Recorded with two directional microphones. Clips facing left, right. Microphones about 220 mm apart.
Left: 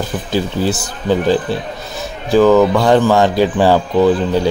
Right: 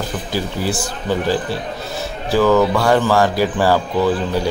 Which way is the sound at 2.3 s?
15° left (ahead or behind).